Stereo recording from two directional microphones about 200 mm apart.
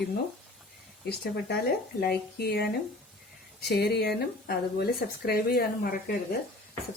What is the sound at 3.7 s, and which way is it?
Speech, 55° left (ahead or behind).